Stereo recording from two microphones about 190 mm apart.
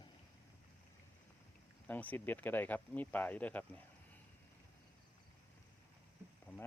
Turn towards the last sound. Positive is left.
turn(degrees=10)  # may be behind; listen again after turning